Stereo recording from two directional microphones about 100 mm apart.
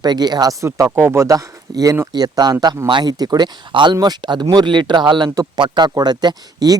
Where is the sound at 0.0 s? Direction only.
45° right (ahead or behind).